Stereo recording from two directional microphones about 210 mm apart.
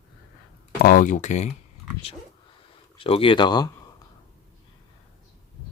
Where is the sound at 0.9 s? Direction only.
40° left (ahead or behind).